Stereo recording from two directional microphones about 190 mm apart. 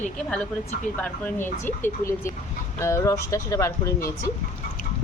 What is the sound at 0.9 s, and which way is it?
Speech, 10° left (ahead or behind).